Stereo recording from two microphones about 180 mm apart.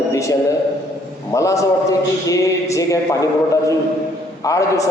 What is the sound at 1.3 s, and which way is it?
A man's voice, 15° left (ahead or behind).